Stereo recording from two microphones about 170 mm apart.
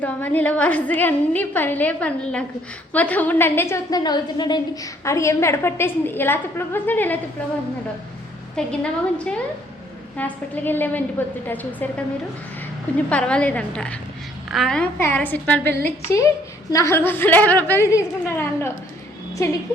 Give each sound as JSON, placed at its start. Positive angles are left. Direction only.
{"t": 0.0, "sound": "a woman's voice", "side_deg": 10}
{"t": 8.5, "sound": "a woman's voice", "side_deg": 5}
{"t": 13.1, "sound": "a woman's voice", "side_deg": 5}